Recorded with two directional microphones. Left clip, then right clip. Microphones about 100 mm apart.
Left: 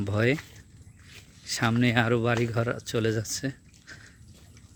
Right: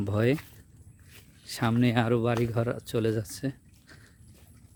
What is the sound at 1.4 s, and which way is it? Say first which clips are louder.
Speech: left 2 dB; 30° right (ahead or behind).